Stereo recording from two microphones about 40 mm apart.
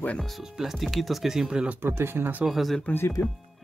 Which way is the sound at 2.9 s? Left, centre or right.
Left.